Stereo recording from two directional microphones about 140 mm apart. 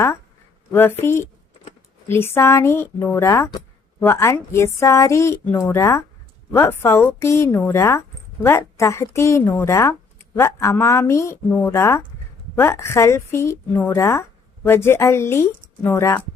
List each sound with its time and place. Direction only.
0.7 s speech: 15° left (ahead or behind)